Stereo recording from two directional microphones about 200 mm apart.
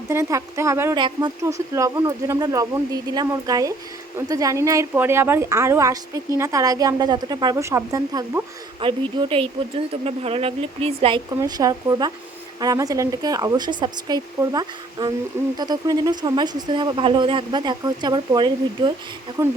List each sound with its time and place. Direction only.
0.1 s a woman's voice: 15° right (ahead or behind)
11.3 s a woman's voice: 20° right (ahead or behind)